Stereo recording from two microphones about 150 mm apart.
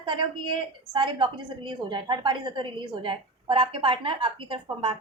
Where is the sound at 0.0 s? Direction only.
30° right (ahead or behind).